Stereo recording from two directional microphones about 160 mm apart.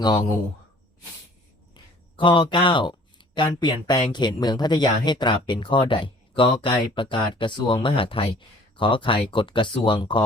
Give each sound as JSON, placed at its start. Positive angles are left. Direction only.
{"t": 0.0, "sound": "speech", "side_deg": 25}
{"t": 1.7, "sound": "a sound", "side_deg": 30}
{"t": 3.3, "sound": "speech", "side_deg": 30}